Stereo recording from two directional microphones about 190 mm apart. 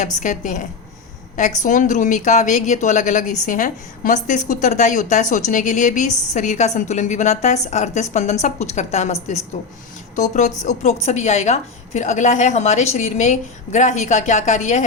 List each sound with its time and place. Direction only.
0.2 s a woman's voice: 40° left (ahead or behind)
10.6 s a woman's voice: 35° left (ahead or behind)